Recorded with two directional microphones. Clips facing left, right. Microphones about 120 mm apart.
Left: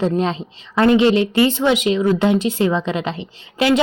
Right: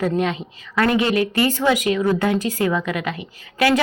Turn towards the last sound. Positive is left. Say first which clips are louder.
# left 1 dB
turn(degrees=25)  # may be behind; listen again after turning